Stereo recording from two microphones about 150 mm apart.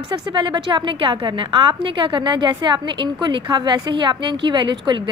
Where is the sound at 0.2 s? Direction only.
30° right (ahead or behind).